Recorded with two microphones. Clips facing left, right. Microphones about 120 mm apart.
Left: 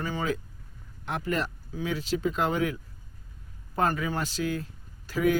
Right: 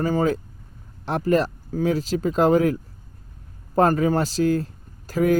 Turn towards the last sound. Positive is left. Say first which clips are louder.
# right 5 dB
turn(degrees=-40)  # may be behind; listen again after turning